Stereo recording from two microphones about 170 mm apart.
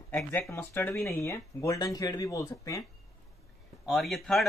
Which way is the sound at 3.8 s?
Centre (ahead or behind).